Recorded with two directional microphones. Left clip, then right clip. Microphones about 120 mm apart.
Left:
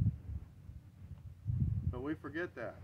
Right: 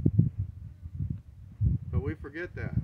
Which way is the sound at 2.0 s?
25° left (ahead or behind).